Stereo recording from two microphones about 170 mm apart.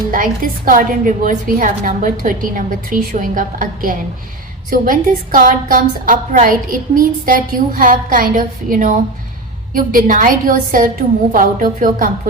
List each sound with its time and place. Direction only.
0.1 s a woman's voice: 55° right (ahead or behind)